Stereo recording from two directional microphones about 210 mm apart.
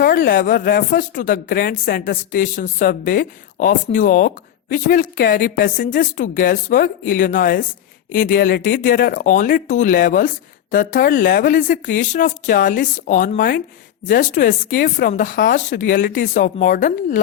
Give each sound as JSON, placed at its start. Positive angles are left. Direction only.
{"t": 0.0, "sound": "speech", "side_deg": 45}